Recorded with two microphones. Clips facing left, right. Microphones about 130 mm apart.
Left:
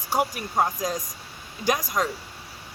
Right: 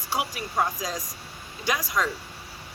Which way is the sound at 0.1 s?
45° left (ahead or behind).